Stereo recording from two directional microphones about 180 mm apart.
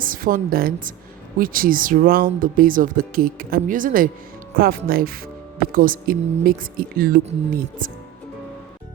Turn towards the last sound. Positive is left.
turn(degrees=-50)  # may be behind; listen again after turning